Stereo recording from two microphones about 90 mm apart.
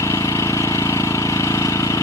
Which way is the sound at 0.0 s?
35° left (ahead or behind).